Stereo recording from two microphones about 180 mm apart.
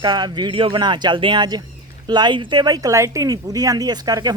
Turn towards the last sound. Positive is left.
turn(degrees=-20)  # may be behind; listen again after turning